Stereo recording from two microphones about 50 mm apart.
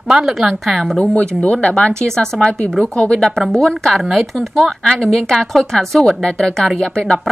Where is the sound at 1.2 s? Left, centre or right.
Left.